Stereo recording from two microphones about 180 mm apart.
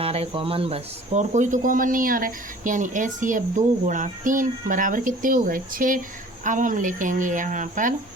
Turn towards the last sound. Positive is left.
turn(degrees=-45)  # may be behind; listen again after turning